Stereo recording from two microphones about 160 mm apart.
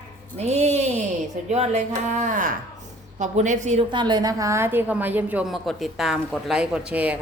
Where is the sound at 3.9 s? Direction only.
30° right (ahead or behind).